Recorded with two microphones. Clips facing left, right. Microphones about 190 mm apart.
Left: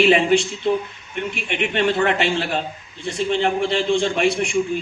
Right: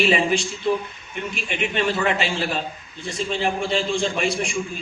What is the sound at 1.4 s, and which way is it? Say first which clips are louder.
A man's voice: left 3 dB; 65° left (ahead or behind).